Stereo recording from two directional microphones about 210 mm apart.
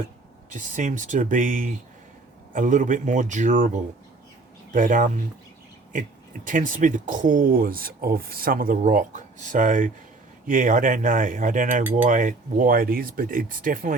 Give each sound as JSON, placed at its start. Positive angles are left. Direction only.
{"t": 0.5, "sound": "speech", "side_deg": -35}
{"t": 4.7, "sound": "speech", "side_deg": -40}